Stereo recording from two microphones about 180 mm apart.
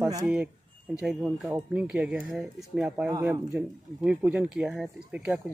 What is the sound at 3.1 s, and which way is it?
Speech, 20° right (ahead or behind).